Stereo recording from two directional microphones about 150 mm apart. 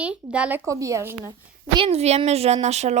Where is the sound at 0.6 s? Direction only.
20° right (ahead or behind).